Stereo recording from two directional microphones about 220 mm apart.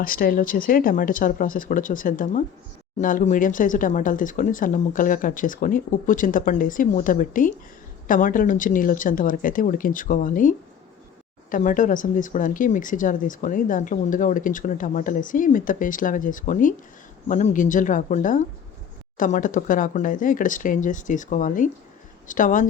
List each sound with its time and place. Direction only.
0.0 s speech: 40° left (ahead or behind)
11.5 s speech: 35° left (ahead or behind)